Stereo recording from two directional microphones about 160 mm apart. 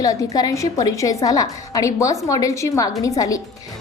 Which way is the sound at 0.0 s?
20° left (ahead or behind).